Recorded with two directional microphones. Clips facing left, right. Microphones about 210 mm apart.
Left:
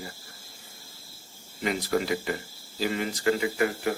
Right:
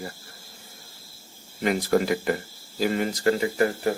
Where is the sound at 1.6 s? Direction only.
50° right (ahead or behind).